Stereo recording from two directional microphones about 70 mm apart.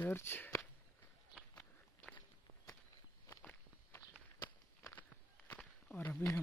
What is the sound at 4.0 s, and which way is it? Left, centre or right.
Walk, left.